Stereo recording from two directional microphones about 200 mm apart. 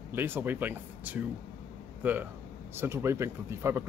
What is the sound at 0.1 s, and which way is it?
A man's voice, 10° right (ahead or behind).